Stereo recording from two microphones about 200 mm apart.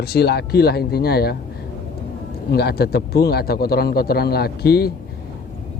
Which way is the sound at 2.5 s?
55° left (ahead or behind).